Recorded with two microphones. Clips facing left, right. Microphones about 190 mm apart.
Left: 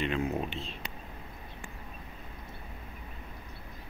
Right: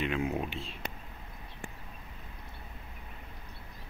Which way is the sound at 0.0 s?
5° right (ahead or behind).